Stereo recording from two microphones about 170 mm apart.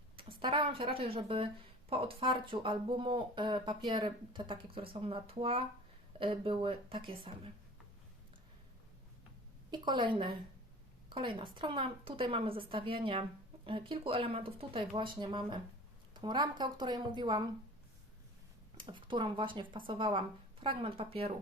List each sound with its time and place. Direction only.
0.2 s speech: 30° right (ahead or behind)
9.7 s speech: 25° right (ahead or behind)
18.8 s speech: 30° right (ahead or behind)